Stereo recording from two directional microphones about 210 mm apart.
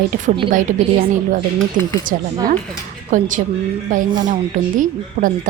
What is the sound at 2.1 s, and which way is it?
A woman's voice, 35° right (ahead or behind).